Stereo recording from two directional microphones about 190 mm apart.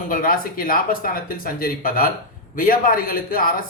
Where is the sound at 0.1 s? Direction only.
50° left (ahead or behind).